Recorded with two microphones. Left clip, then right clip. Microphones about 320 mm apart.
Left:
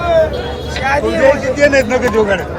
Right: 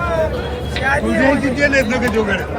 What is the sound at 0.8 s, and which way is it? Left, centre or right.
Speech, left.